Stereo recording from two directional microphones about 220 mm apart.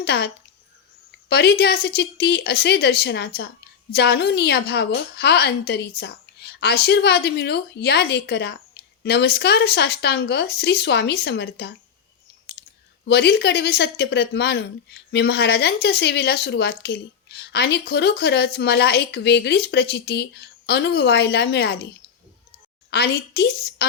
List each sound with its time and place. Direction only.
0.0 s speech: 50° left (ahead or behind)
1.3 s speech: 50° left (ahead or behind)
13.1 s speech: 50° left (ahead or behind)
22.9 s speech: 45° left (ahead or behind)